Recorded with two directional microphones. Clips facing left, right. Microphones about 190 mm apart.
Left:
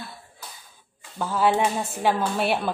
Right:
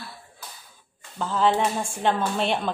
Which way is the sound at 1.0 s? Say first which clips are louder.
Even; 10° left (ahead or behind).